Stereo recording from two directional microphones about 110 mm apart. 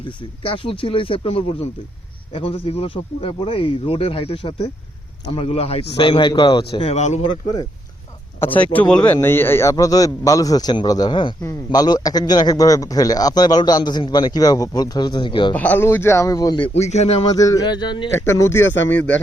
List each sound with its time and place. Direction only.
0.4 s a man's voice: 55° left (ahead or behind)
6.8 s speech: 90° left
8.4 s speech: 15° left (ahead or behind)
9.2 s a man's voice: 20° left (ahead or behind); by 15.5 s 45° left (ahead or behind)
15.5 s speech: 15° left (ahead or behind); by 16.6 s 30° left (ahead or behind)
16.8 s speech: 85° left
17.3 s a man's voice: 30° left (ahead or behind)
18.1 s speech: 25° left (ahead or behind)